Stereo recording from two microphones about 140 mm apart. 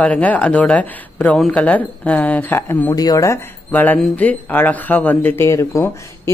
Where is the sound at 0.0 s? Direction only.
10° left (ahead or behind).